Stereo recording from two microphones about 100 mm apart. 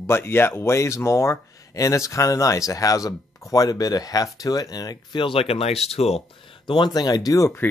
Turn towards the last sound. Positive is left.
turn(degrees=35)  # may be behind; listen again after turning